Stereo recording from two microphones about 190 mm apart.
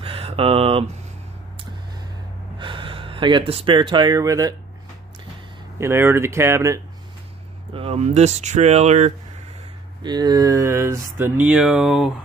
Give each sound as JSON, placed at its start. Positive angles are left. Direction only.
{"t": 0.0, "sound": "a sound", "side_deg": -30}
{"t": 2.6, "sound": "speech", "side_deg": -25}
{"t": 5.8, "sound": "speech", "side_deg": -15}
{"t": 7.7, "sound": "speech", "side_deg": -30}
{"t": 10.0, "sound": "speech", "side_deg": -20}